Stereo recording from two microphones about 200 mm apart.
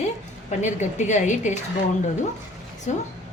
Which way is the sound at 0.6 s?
35° left (ahead or behind).